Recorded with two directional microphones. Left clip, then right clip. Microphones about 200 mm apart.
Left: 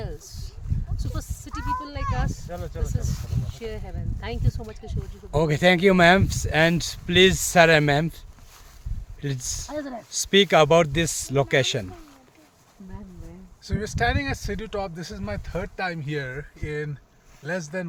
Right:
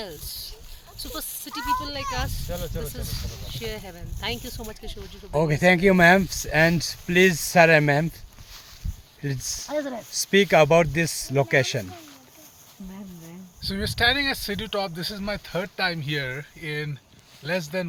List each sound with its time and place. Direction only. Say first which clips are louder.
1.8 s speech: right 2 dB; 10° left (ahead or behind)
2.5 s speech: right 2 dB; 55° right (ahead or behind)
3.2 s speech: right 2 dB; centre (ahead or behind)
9.6 s speech: right 8 dB; 40° right (ahead or behind)
10.3 s speech: even; 10° left (ahead or behind)
13.7 s speech: right 3 dB; 10° left (ahead or behind)